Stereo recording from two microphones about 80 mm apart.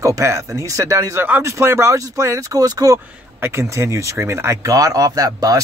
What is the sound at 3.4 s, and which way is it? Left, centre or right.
Speech, right.